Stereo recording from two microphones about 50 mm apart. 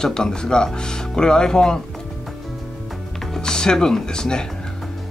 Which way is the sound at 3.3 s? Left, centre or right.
Centre.